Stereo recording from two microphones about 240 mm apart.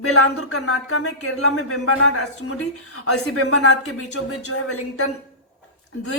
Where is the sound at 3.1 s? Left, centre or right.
Left.